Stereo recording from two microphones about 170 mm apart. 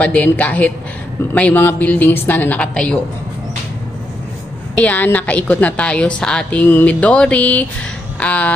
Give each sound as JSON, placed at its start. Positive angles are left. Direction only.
{"t": 0.0, "sound": "a woman's voice", "side_deg": 10}
{"t": 4.7, "sound": "a woman's voice", "side_deg": 10}